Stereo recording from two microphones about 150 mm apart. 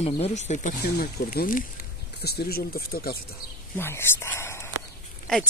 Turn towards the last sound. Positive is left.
turn(degrees=5)  # may be behind; listen again after turning